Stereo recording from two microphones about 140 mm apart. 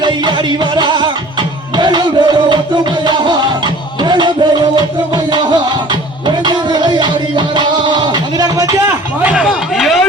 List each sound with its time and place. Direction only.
0.0 s music: 35° right (ahead or behind)
9.2 s chatter: 5° right (ahead or behind)